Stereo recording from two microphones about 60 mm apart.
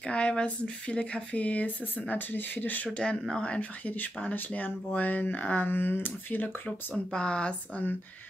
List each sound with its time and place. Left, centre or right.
0.0 s speech: centre
3.0 s speech: centre; by 7.0 s left
7.1 s speech: centre